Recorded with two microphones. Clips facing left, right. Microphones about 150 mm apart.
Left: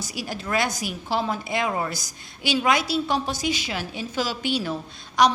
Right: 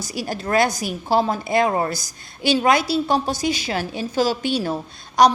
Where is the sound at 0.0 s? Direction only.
40° right (ahead or behind).